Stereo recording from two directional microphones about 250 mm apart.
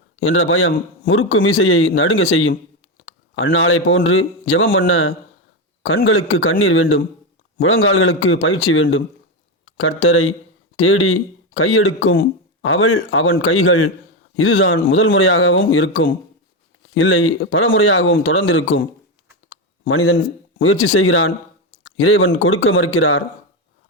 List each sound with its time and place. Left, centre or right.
0.2 s a man's voice: left